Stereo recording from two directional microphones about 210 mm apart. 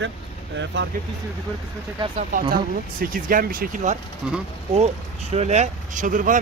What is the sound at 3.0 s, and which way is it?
Speech, 40° right (ahead or behind).